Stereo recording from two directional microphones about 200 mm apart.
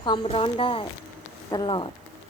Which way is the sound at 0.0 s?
25° left (ahead or behind).